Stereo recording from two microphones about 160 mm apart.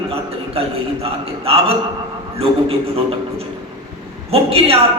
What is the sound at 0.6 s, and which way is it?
A man's voice, 35° right (ahead or behind).